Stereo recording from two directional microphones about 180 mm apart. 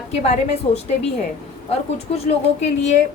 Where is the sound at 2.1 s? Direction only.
35° left (ahead or behind).